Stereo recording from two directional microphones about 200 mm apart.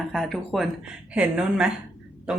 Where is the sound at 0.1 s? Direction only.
Centre (ahead or behind).